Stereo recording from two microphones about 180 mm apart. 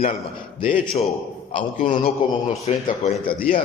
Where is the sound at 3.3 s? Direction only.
55° left (ahead or behind).